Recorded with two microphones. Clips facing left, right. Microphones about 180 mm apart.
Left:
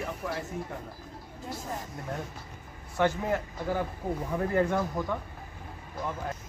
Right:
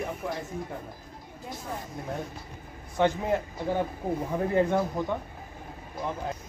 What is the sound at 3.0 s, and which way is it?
A man's voice, 20° right (ahead or behind).